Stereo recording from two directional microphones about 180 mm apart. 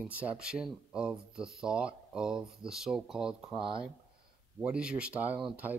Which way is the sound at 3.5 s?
30° right (ahead or behind).